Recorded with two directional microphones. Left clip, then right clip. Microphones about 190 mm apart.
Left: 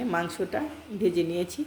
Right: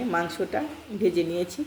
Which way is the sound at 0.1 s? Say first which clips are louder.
Right 3 dB; 10° left (ahead or behind).